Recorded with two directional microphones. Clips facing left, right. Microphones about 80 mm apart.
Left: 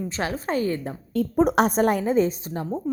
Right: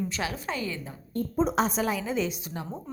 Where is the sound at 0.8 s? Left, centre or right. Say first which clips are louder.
Left 7 dB; left.